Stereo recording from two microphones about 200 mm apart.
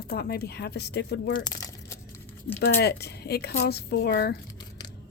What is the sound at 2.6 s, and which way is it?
A woman's voice, 55° left (ahead or behind).